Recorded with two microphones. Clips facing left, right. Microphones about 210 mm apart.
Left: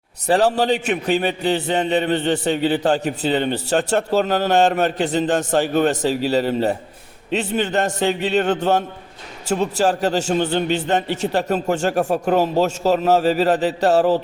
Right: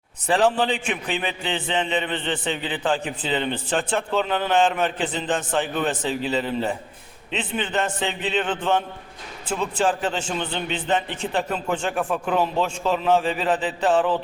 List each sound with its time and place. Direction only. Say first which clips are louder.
0.3 s a man's voice: left 3 dB; 40° left (ahead or behind)